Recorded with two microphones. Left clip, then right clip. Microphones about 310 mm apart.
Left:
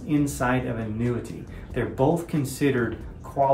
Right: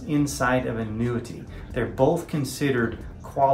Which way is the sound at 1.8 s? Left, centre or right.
Centre.